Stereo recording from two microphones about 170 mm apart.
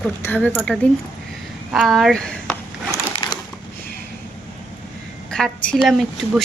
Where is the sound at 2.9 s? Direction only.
25° left (ahead or behind).